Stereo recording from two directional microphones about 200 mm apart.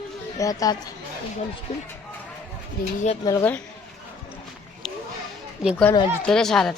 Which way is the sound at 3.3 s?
10° left (ahead or behind).